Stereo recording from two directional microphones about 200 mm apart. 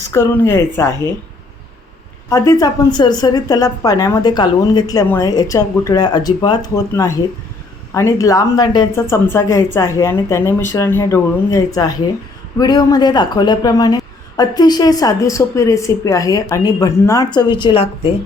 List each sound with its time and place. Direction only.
0.1 s speech: 15° left (ahead or behind)
2.3 s speech: 15° left (ahead or behind)